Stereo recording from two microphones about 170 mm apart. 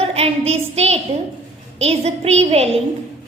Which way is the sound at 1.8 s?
40° right (ahead or behind).